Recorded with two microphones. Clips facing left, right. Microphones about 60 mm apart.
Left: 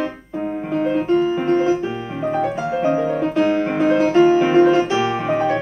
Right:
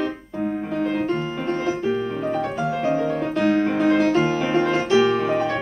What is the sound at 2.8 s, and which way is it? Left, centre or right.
Music, centre.